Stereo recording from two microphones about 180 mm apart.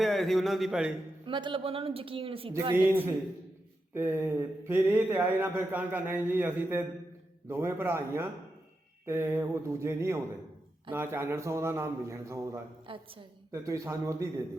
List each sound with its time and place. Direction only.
0.0 s speech: centre (ahead or behind)
1.2 s speech: 25° right (ahead or behind)
3.9 s speech: 10° right (ahead or behind)
12.9 s a woman's voice: 30° right (ahead or behind)
13.5 s speech: 15° right (ahead or behind)